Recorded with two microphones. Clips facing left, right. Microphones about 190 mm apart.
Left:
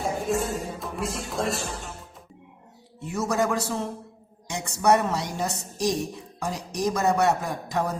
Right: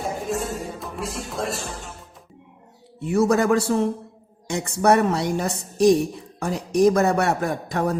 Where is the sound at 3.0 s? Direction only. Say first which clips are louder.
Right 7 dB; 60° right (ahead or behind).